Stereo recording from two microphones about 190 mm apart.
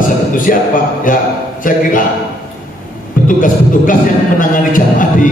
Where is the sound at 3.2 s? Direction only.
45° left (ahead or behind).